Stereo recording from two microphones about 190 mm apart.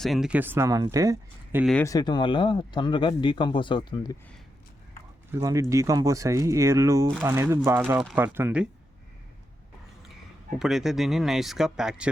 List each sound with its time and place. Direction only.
0.0 s speech: centre (ahead or behind); by 1.6 s 15° right (ahead or behind)
1.8 s speech: 20° left (ahead or behind)
5.4 s speech: 15° right (ahead or behind)
10.6 s speech: centre (ahead or behind)